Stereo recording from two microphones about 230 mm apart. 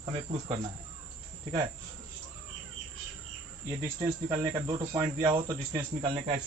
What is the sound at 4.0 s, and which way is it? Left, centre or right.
Speech, centre.